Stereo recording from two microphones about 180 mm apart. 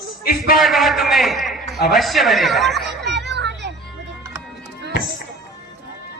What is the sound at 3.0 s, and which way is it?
Children playing, 70° right (ahead or behind).